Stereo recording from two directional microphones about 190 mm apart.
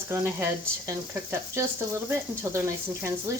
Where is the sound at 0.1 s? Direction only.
15° right (ahead or behind).